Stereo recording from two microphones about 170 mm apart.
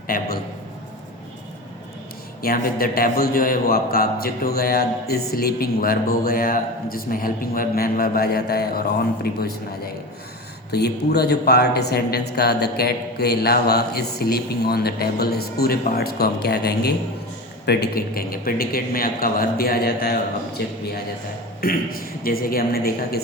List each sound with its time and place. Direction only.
0.1 s a sound: 60° left (ahead or behind)
2.4 s a man's voice: 60° left (ahead or behind)
10.7 s a man's voice: 70° left (ahead or behind)